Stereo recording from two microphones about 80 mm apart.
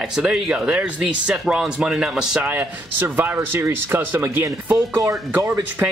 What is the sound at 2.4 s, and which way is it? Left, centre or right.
A man's voice, right.